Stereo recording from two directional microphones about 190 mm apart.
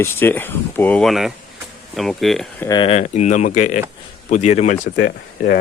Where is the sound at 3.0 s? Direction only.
40° left (ahead or behind).